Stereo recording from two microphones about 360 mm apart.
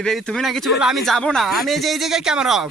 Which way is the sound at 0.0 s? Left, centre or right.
Centre.